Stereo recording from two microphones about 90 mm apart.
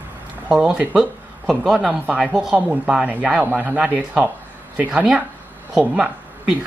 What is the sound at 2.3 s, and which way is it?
Speech, 5° right (ahead or behind).